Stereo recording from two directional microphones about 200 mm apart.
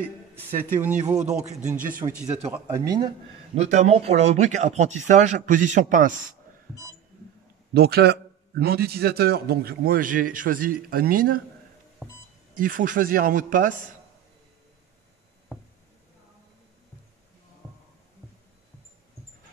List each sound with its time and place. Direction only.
0.4 s speech: 10° right (ahead or behind)
1.1 s speech: 35° right (ahead or behind)
2.5 s speech: 15° right (ahead or behind)
3.5 s speech: 35° right (ahead or behind)
7.7 s a man's voice: 50° right (ahead or behind)
12.0 s beep: 5° right (ahead or behind)
12.5 s a man's voice: 40° right (ahead or behind)